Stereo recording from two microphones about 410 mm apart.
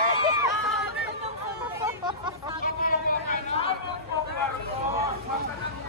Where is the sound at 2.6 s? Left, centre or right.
Centre.